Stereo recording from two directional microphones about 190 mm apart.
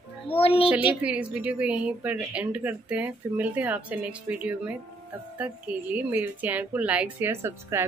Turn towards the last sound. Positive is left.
turn(degrees=-15)  # may be behind; listen again after turning